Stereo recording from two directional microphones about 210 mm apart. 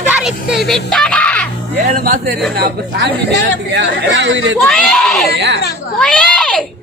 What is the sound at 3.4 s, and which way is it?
Speech, 55° right (ahead or behind).